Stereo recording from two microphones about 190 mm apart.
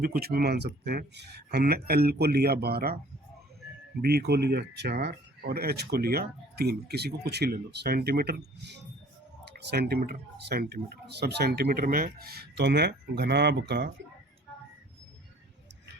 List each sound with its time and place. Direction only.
0.0 s speech: 50° right (ahead or behind)
4.0 s speech: 55° right (ahead or behind)
9.4 s speech: 60° right (ahead or behind)